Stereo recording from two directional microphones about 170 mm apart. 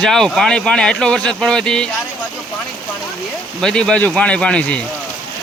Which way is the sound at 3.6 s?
5° left (ahead or behind).